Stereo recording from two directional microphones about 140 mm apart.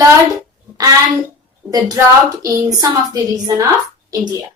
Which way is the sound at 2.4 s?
30° right (ahead or behind).